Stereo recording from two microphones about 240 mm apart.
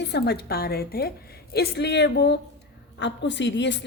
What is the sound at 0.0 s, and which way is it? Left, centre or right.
A woman's voice, left.